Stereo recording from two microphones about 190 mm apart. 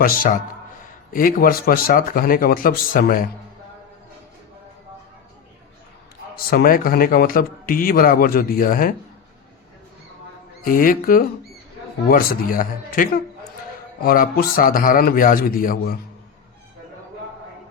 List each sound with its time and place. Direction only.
0.0 s a man's voice: 50° left (ahead or behind)
6.3 s a man's voice: 50° left (ahead or behind)
10.6 s a man's voice: 50° left (ahead or behind)